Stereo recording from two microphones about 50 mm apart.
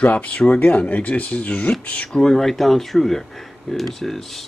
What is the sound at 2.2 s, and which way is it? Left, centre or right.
Speech, centre.